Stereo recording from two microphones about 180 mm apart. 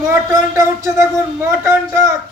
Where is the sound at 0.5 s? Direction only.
15° right (ahead or behind).